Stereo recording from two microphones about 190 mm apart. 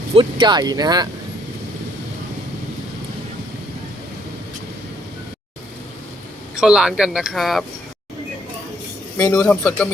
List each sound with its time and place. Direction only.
0.1 s speech: 25° right (ahead or behind)
6.6 s speech: 5° right (ahead or behind)
9.1 s a man's voice: 20° left (ahead or behind)